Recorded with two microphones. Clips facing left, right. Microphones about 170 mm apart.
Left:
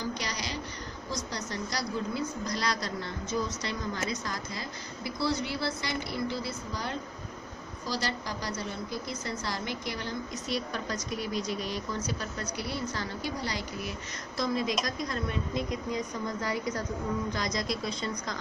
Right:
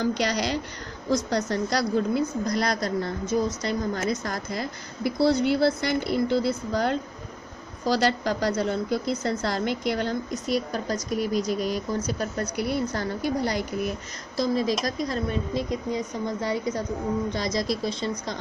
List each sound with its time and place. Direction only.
0.0 s a woman's voice: 75° right (ahead or behind); by 10.1 s 60° right (ahead or behind)
10.5 s speech: 40° right (ahead or behind)
14.3 s speech: 35° right (ahead or behind)